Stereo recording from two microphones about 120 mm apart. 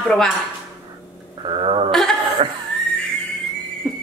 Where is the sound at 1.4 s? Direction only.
50° right (ahead or behind).